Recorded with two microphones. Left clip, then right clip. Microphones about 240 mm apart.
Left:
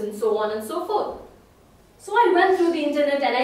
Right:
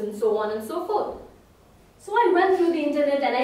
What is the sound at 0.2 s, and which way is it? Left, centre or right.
Speech, centre.